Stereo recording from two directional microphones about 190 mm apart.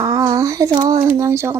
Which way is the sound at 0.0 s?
20° right (ahead or behind).